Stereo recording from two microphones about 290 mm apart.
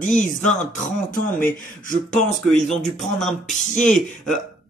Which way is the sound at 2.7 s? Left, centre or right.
Centre.